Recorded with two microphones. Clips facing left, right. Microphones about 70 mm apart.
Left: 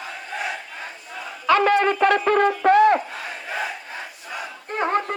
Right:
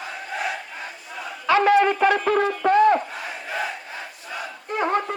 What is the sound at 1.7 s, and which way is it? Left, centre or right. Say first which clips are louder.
Speech: right 1 dB; left.